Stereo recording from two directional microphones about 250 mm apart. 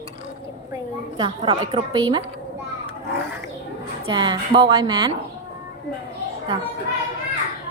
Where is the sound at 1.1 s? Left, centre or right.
Centre.